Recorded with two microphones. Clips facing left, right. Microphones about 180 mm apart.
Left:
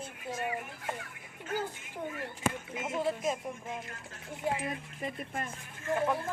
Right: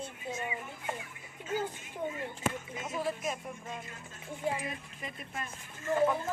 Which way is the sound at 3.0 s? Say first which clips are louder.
Left 3 dB; 25° left (ahead or behind).